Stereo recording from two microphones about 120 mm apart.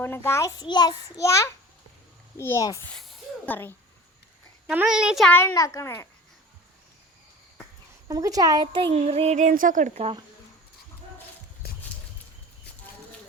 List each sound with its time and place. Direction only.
0.0 s a child's voice: 20° left (ahead or behind)
2.9 s a sound: centre (ahead or behind)
3.4 s speech: 15° left (ahead or behind)
4.7 s a child's voice: 10° right (ahead or behind)
5.3 s a child's voice: 20° left (ahead or behind)
8.0 s speech: 30° right (ahead or behind)
8.9 s speech: 60° right (ahead or behind)